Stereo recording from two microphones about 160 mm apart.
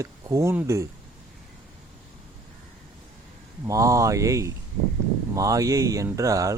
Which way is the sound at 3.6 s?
20° right (ahead or behind).